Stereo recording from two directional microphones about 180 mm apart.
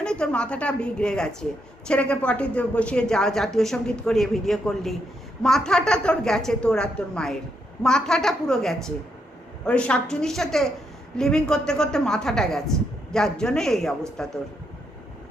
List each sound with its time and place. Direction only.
0.0 s speech: 5° left (ahead or behind)